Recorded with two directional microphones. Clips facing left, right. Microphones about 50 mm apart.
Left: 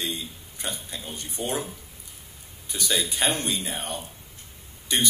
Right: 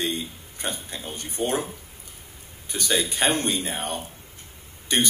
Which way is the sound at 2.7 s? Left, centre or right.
Right.